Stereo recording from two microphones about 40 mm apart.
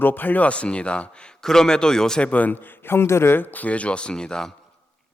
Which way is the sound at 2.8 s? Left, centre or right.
Left.